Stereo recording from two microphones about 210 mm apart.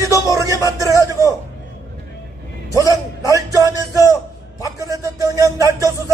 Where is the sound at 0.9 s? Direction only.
15° left (ahead or behind).